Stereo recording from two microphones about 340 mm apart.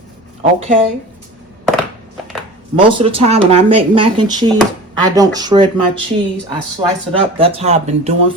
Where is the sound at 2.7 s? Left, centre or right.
Centre.